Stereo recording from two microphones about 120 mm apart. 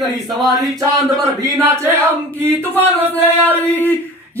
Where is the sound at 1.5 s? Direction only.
25° right (ahead or behind).